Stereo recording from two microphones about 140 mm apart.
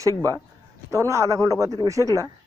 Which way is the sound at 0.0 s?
25° right (ahead or behind).